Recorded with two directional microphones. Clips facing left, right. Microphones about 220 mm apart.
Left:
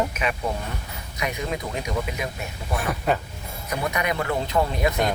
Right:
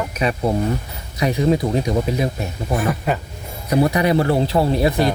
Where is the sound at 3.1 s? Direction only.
Centre (ahead or behind).